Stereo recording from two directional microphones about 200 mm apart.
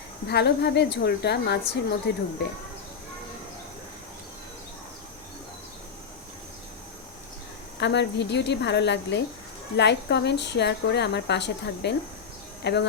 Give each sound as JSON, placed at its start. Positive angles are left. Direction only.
{"t": 0.3, "sound": "a woman's voice", "side_deg": 55}
{"t": 7.8, "sound": "a woman's voice", "side_deg": 60}